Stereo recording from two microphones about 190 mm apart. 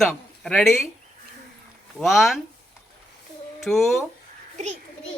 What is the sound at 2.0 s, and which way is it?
Speech, centre (ahead or behind).